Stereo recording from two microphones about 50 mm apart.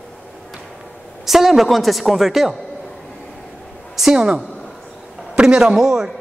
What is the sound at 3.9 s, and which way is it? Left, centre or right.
Speech, centre.